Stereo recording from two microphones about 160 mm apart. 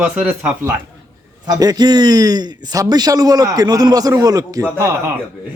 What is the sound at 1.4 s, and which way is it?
A man's voice, 25° right (ahead or behind).